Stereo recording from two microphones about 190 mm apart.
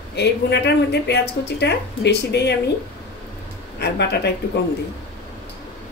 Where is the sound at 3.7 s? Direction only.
60° left (ahead or behind).